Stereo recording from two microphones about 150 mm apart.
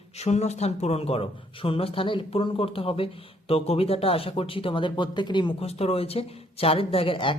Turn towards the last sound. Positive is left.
turn(degrees=35)  # may be behind; listen again after turning